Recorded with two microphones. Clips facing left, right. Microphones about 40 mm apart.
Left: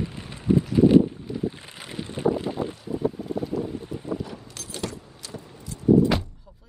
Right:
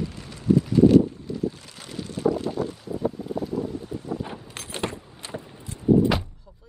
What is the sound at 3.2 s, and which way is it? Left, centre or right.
Wind, centre.